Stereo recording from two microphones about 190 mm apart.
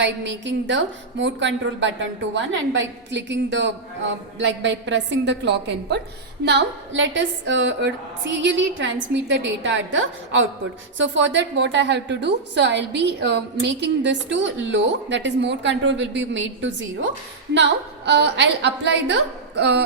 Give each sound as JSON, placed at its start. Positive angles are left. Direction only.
{"t": 0.0, "sound": "a woman's voice", "side_deg": -70}